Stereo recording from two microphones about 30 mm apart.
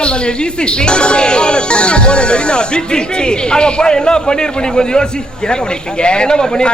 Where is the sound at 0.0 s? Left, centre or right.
Left.